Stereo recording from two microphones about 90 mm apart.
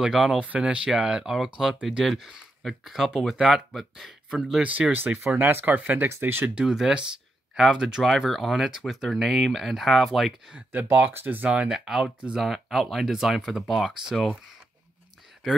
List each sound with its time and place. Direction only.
0.0 s speech: 10° right (ahead or behind)
10.7 s speech: 20° right (ahead or behind)
11.7 s speech: 5° right (ahead or behind)